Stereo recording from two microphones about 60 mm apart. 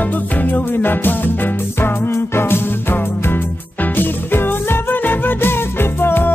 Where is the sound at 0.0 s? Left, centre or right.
Left.